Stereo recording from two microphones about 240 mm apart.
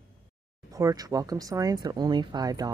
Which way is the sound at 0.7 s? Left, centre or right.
Centre.